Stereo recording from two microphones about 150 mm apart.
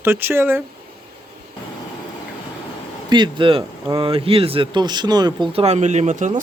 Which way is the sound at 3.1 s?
35° right (ahead or behind).